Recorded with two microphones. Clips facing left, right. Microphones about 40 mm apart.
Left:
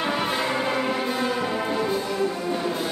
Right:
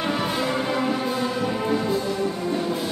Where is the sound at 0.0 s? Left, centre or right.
Centre.